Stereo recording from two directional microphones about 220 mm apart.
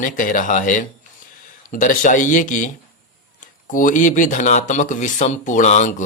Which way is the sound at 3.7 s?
35° left (ahead or behind).